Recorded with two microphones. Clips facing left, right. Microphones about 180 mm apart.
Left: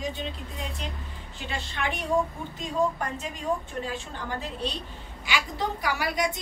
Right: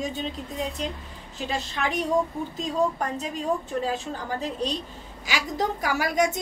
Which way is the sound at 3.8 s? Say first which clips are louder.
Right 5 dB; 40° right (ahead or behind).